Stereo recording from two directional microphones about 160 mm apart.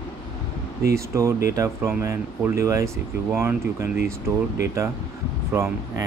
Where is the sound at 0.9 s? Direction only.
20° right (ahead or behind).